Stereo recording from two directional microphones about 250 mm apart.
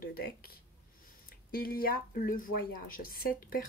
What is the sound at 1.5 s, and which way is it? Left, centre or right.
Speech, left.